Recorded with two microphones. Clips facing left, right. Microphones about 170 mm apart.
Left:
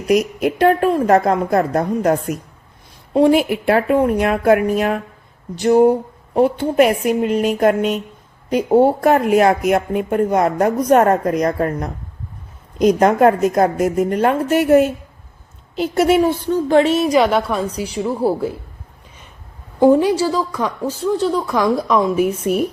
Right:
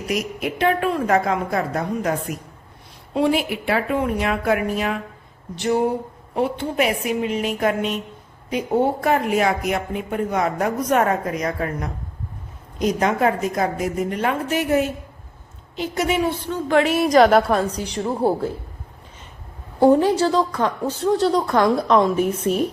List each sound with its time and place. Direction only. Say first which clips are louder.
0.1 s a woman's voice: left 9 dB; 45° left (ahead or behind)
3.2 s speech: left 7 dB; 45° left (ahead or behind)
13.0 s speech: left 6 dB; 50° left (ahead or behind)
15.7 s a woman's voice: left 7 dB; 35° left (ahead or behind)
17.1 s a woman's voice: right 1 dB; centre (ahead or behind)
19.8 s a woman's voice: left 2 dB; 10° left (ahead or behind)